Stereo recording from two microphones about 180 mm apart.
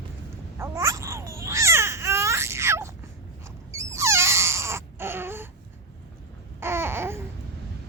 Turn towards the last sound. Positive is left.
turn(degrees=-15)  # may be behind; listen again after turning